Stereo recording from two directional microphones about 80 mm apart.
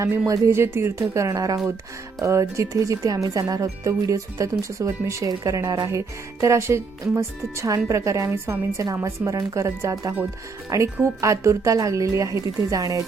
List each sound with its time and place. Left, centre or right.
0.0 s speech: right
1.1 s a woman's voice: right